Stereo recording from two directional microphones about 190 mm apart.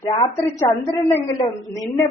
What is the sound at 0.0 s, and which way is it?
A woman's voice, 20° left (ahead or behind).